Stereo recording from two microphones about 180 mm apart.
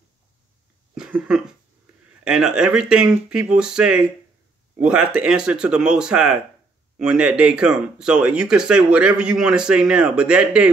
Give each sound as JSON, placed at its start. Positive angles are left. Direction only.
{"t": 0.9, "sound": "cough", "side_deg": -5}
{"t": 2.2, "sound": "speech", "side_deg": -5}